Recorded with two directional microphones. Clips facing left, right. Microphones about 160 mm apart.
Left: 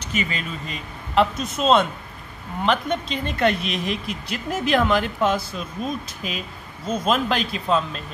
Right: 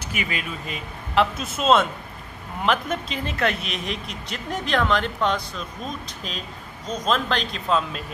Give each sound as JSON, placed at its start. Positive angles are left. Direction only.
{"t": 0.0, "sound": "speech", "side_deg": -10}